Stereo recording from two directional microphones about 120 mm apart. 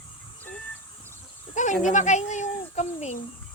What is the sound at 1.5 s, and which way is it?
Insect, 90° left.